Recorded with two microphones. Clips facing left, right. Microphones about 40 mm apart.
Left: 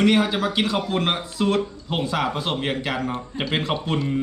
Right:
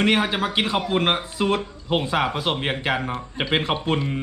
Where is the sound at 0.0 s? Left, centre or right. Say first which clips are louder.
Left 1 dB; right.